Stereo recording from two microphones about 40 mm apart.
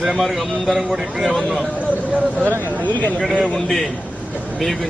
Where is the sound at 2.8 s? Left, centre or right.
Left.